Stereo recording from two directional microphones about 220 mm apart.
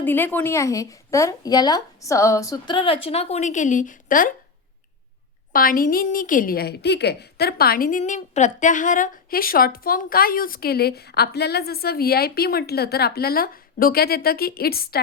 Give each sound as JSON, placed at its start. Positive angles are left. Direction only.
{"t": 0.0, "sound": "a woman's voice", "side_deg": 10}
{"t": 5.5, "sound": "a woman's voice", "side_deg": 40}